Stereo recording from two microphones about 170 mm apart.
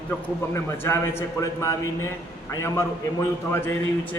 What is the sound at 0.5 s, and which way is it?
A man's voice, 15° left (ahead or behind).